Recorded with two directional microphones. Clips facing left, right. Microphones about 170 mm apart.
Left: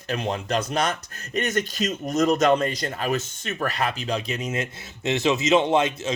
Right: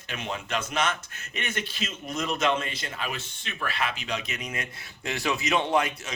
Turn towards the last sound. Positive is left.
turn(degrees=25)  # may be behind; listen again after turning